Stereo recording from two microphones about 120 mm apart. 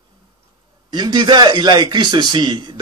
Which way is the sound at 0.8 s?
35° right (ahead or behind).